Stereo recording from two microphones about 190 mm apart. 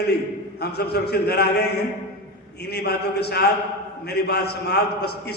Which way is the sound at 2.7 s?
60° left (ahead or behind).